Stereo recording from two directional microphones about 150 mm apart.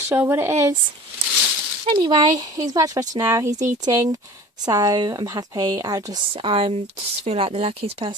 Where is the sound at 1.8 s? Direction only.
30° right (ahead or behind).